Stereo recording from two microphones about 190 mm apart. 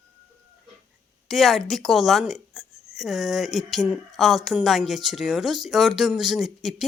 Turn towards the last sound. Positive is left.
turn(degrees=0)  # may be behind; listen again after turning